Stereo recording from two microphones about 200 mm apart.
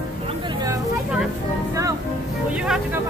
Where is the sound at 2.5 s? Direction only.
5° right (ahead or behind).